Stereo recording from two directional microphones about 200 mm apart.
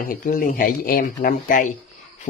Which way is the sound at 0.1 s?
45° left (ahead or behind).